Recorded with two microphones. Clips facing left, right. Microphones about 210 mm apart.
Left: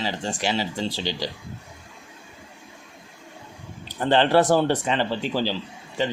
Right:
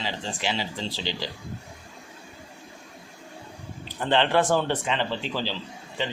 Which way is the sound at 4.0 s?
40° left (ahead or behind).